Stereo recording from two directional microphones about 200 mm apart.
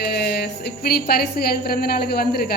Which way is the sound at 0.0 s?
55° left (ahead or behind).